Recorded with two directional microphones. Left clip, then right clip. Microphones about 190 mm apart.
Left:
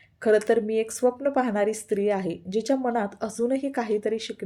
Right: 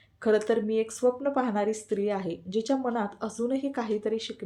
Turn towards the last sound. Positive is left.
turn(degrees=40)  # may be behind; listen again after turning